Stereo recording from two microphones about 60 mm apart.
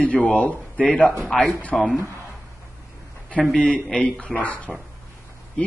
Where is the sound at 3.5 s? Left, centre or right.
Centre.